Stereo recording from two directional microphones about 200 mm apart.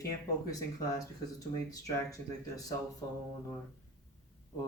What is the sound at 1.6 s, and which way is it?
Speech, 15° left (ahead or behind).